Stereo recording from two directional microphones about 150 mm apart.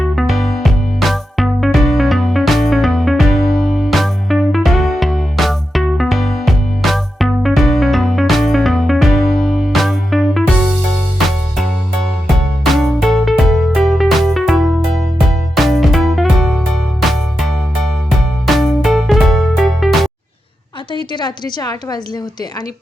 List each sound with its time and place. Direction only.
0.0 s music: centre (ahead or behind)
12.3 s music: centre (ahead or behind)
20.9 s a woman's voice: 30° left (ahead or behind)